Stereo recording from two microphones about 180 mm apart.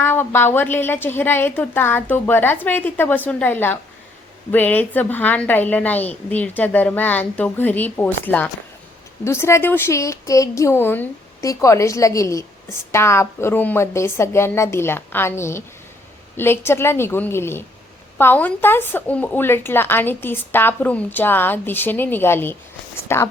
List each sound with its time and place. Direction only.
0.0 s a woman's voice: 10° left (ahead or behind)